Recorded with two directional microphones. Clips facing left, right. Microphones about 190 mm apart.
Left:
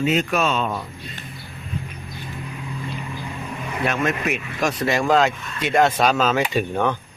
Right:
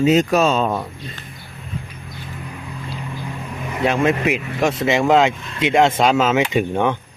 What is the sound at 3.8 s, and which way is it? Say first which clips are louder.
Speech: right 5 dB; 30° right (ahead or behind).